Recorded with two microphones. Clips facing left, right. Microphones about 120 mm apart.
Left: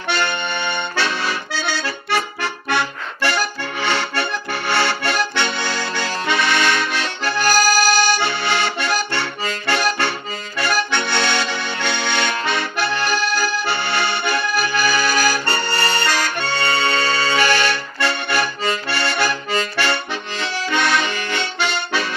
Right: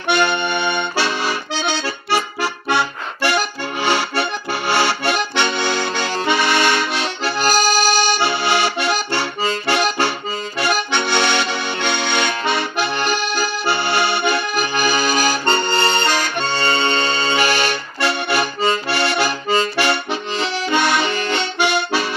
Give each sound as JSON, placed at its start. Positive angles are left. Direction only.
{"t": 0.1, "sound": "accordion", "side_deg": -15}
{"t": 2.0, "sound": "accordion", "side_deg": -5}
{"t": 21.6, "sound": "accordion", "side_deg": -15}